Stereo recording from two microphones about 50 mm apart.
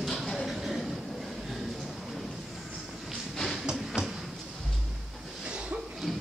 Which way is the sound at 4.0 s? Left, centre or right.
Right.